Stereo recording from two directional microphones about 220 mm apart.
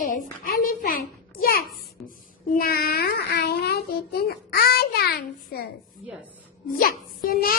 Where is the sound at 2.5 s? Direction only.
45° left (ahead or behind).